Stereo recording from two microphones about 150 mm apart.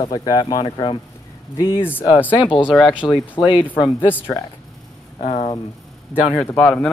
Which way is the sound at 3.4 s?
35° left (ahead or behind).